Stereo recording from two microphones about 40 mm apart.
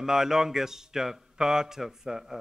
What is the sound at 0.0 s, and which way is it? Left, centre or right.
A man's voice, centre.